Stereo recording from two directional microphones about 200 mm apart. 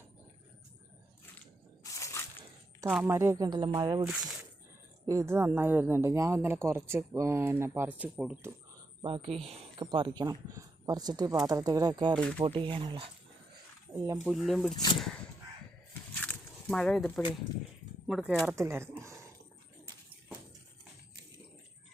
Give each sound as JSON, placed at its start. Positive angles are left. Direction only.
{"t": 1.8, "sound": "a sound", "side_deg": 15}
{"t": 2.8, "sound": "speech", "side_deg": 0}
{"t": 3.1, "sound": "speech", "side_deg": -15}
{"t": 4.0, "sound": "speech", "side_deg": -5}
{"t": 5.0, "sound": "speech", "side_deg": -15}
{"t": 9.0, "sound": "speech", "side_deg": -25}
{"t": 14.3, "sound": "speech", "side_deg": 0}
{"t": 16.2, "sound": "a sound", "side_deg": 5}
{"t": 18.1, "sound": "speech", "side_deg": 0}